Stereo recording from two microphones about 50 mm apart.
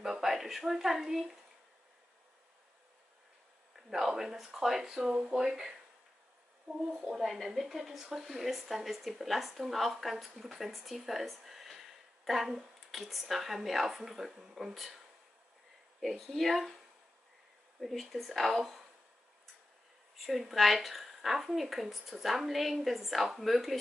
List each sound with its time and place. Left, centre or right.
0.0 s a woman's voice: centre
3.7 s speech: centre
6.9 s speech: centre
16.0 s speech: centre
17.7 s speech: centre
20.2 s speech: centre